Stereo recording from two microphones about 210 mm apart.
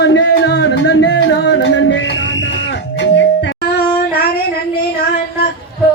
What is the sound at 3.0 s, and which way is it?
Music, 60° left (ahead or behind).